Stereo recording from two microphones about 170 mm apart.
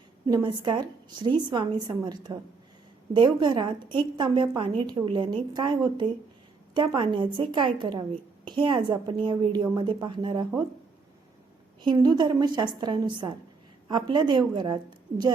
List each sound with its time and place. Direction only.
0.3 s a woman's voice: 25° right (ahead or behind)
11.8 s a woman's voice: 25° right (ahead or behind)